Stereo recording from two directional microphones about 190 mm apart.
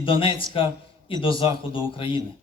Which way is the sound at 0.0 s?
25° left (ahead or behind).